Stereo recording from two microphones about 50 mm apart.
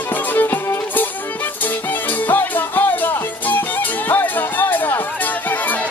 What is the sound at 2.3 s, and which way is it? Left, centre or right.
Music, left.